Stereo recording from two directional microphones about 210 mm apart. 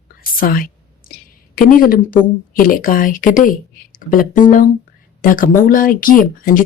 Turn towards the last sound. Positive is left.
turn(degrees=40)  # may be behind; listen again after turning